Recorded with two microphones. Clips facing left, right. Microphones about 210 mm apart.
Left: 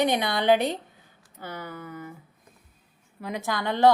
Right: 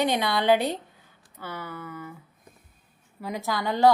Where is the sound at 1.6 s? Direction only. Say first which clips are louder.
Even; 40° left (ahead or behind).